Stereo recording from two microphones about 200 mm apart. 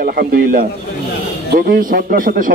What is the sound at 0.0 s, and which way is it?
A man's voice, 50° right (ahead or behind).